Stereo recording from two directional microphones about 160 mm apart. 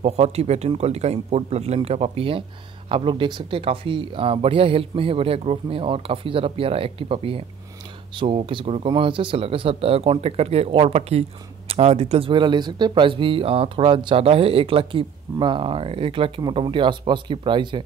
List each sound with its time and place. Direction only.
0.0 s speech: 40° right (ahead or behind)